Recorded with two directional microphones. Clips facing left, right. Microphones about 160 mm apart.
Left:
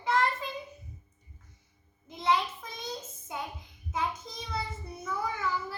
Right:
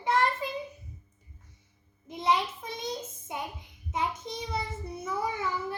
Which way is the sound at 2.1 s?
20° right (ahead or behind).